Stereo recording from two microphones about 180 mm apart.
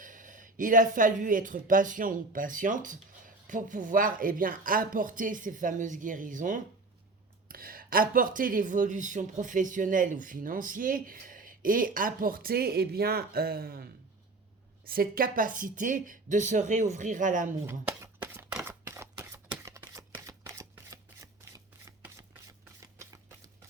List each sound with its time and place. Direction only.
0.0 s speech: 45° right (ahead or behind)
14.8 s speech: 55° right (ahead or behind)
17.7 s single-lens reflex camera: 10° right (ahead or behind)
22.8 s a sound: 15° right (ahead or behind)